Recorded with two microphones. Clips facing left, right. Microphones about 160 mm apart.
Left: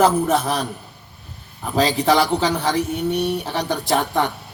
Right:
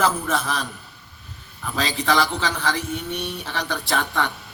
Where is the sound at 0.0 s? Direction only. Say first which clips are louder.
Left 6 dB; 40° left (ahead or behind).